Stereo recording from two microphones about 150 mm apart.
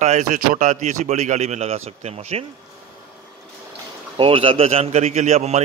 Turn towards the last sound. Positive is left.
turn(degrees=-45)  # may be behind; listen again after turning